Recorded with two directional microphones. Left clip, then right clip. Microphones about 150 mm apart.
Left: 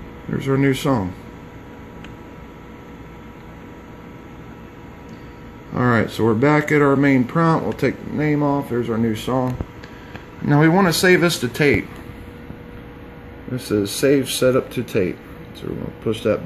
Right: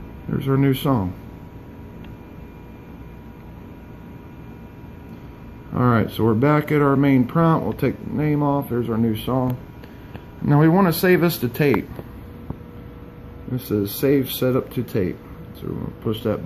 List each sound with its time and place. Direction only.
0.3 s speech: 5° left (ahead or behind)
5.8 s speech: 5° left (ahead or behind)
13.6 s speech: centre (ahead or behind)